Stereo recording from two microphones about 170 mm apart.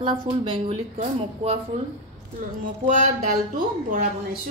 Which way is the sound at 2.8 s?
45° right (ahead or behind).